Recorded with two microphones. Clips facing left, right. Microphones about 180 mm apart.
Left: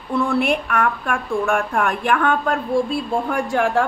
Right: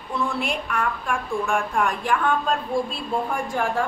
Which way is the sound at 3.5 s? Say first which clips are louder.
Left 7 dB; 80° left.